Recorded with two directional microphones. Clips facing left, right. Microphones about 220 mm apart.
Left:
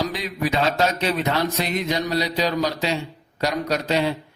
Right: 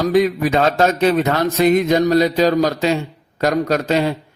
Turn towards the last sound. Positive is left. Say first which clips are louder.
# right 5 dB
turn(degrees=-45)  # may be behind; listen again after turning